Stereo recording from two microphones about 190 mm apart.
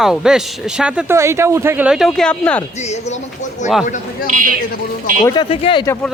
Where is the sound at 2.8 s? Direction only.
35° left (ahead or behind).